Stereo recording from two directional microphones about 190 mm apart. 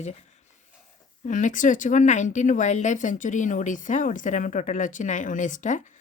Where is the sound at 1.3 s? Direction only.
40° left (ahead or behind).